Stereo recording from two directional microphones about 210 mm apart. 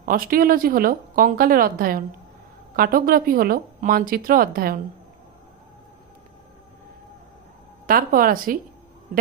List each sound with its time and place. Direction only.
0.0 s speech: 40° right (ahead or behind)
7.8 s speech: 45° right (ahead or behind)